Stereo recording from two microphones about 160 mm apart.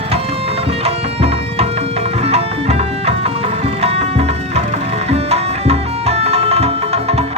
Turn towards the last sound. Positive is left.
turn(degrees=-40)  # may be behind; listen again after turning